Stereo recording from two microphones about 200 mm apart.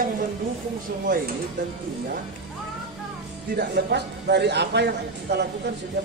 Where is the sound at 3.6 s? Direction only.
55° right (ahead or behind).